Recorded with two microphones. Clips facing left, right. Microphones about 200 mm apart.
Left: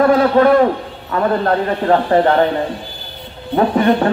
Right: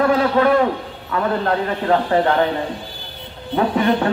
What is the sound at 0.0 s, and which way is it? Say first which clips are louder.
A man's voice: left 4 dB; 45° left (ahead or behind).